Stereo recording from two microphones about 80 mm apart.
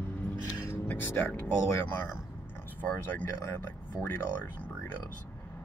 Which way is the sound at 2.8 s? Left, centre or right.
Left.